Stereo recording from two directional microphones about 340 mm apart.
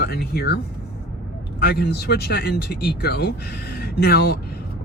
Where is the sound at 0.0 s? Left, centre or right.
Left.